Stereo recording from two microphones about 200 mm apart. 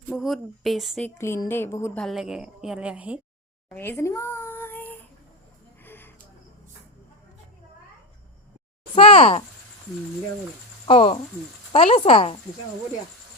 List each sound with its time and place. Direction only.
0.1 s a woman's voice: centre (ahead or behind)
1.2 s a woman's voice: 10° left (ahead or behind)
2.0 s a woman's voice: centre (ahead or behind)
3.7 s a sound: 10° left (ahead or behind)
9.0 s speech: 25° left (ahead or behind)
10.8 s speech: 30° left (ahead or behind)